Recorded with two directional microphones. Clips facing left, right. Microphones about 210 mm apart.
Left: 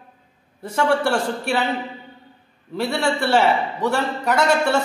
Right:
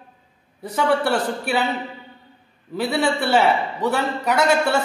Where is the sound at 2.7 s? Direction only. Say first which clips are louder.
Right 1 dB; centre (ahead or behind).